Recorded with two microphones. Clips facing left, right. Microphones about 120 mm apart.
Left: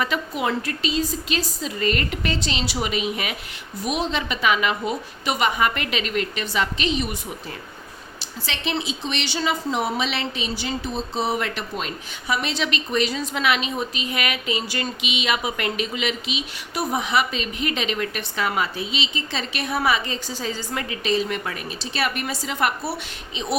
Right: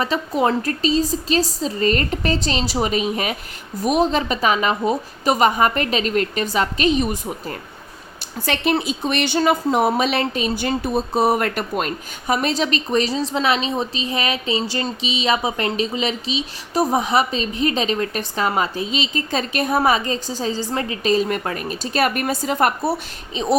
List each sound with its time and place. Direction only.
0.0 s speech: 35° right (ahead or behind)